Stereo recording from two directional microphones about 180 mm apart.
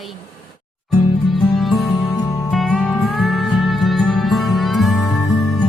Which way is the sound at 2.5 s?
Centre (ahead or behind).